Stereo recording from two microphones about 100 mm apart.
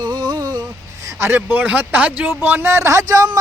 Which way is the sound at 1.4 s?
15° right (ahead or behind).